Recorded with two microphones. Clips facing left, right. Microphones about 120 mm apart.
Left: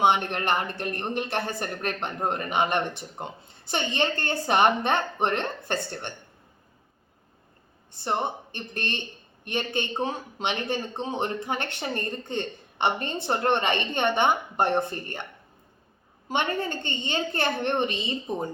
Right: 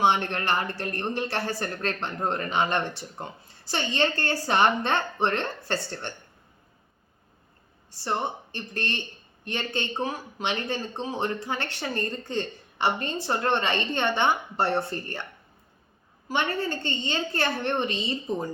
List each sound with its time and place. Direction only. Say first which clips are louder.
0.0 s speech: left 1 dB; 15° left (ahead or behind)
7.9 s speech: left 1 dB; 20° left (ahead or behind)
16.3 s speech: even; 20° left (ahead or behind)